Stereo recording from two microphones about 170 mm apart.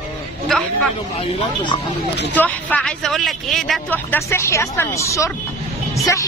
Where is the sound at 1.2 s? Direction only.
35° left (ahead or behind).